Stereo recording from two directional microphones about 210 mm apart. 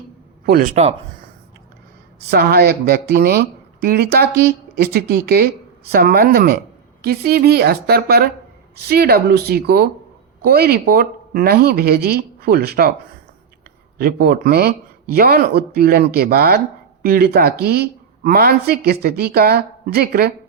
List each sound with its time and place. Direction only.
0.4 s speech: 45° right (ahead or behind)
2.3 s speech: 50° right (ahead or behind)
14.0 s speech: 45° right (ahead or behind)